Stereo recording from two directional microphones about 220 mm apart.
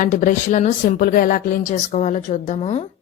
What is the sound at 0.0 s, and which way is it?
Speech, 35° left (ahead or behind).